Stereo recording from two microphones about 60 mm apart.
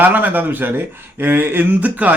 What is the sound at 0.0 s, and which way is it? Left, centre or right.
A man's voice, right.